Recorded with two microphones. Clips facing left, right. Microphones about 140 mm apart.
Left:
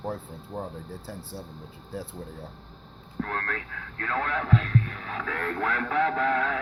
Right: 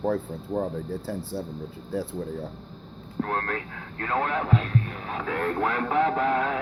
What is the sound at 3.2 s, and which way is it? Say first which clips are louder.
Speech: right 4 dB; 25° right (ahead or behind).